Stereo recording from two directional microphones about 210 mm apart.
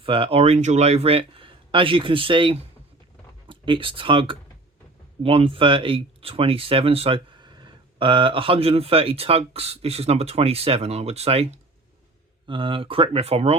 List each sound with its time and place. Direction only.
0.0 s speech: 25° right (ahead or behind)
12.5 s speech: 25° right (ahead or behind)